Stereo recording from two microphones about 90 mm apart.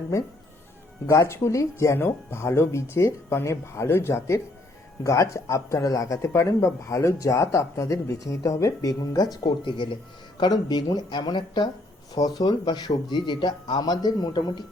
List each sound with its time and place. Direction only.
1.0 s a man's voice: 35° left (ahead or behind); by 14.6 s 55° left (ahead or behind)